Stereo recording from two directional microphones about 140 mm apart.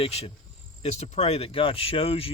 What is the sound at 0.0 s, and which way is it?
Cricket, 45° left (ahead or behind).